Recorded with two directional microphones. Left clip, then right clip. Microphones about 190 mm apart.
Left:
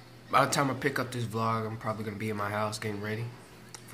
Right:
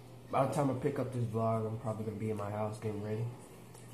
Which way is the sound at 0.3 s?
25° left (ahead or behind).